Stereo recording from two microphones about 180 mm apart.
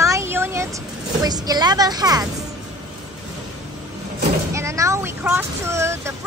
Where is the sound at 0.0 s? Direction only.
15° right (ahead or behind).